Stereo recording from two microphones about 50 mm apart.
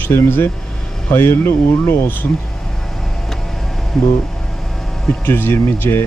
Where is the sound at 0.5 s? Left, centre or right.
Centre.